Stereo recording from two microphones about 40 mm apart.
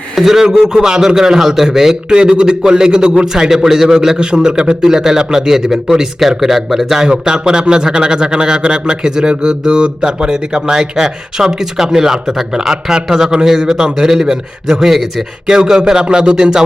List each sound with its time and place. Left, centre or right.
0.2 s speech: centre